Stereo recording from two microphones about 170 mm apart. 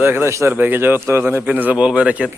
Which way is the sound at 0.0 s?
15° right (ahead or behind).